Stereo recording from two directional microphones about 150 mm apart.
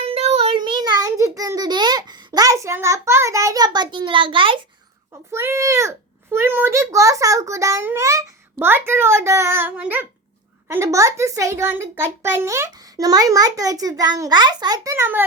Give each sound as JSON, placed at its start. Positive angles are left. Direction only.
{"t": 0.0, "sound": "child singing", "side_deg": -45}
{"t": 5.3, "sound": "a child's voice", "side_deg": -15}